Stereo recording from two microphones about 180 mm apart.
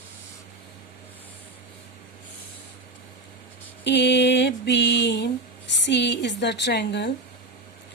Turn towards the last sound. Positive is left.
turn(degrees=70)  # may be behind; listen again after turning